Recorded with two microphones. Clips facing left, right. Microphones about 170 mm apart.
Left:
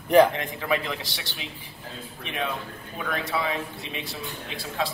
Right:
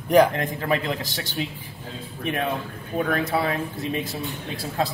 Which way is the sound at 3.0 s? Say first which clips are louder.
Right 6 dB; 45° right (ahead or behind).